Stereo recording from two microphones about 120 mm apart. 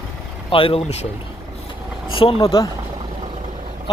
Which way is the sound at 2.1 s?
45° left (ahead or behind).